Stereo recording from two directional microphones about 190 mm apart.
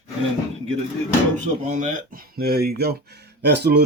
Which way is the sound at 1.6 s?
40° right (ahead or behind).